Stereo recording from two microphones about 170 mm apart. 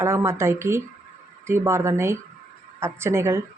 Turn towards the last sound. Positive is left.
turn(degrees=-15)  # may be behind; listen again after turning